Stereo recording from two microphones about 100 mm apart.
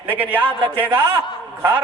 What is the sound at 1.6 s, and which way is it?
Speech, 20° right (ahead or behind).